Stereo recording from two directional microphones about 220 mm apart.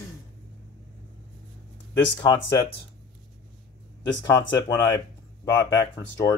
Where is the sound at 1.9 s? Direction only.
15° left (ahead or behind).